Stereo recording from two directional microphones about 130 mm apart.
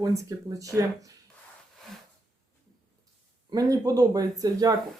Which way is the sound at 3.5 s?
30° right (ahead or behind).